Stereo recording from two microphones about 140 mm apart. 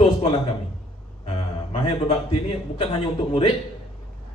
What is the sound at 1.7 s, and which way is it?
A man's voice, 45° left (ahead or behind).